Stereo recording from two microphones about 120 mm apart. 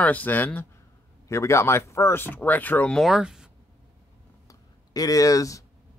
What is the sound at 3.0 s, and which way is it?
Speech, 5° right (ahead or behind).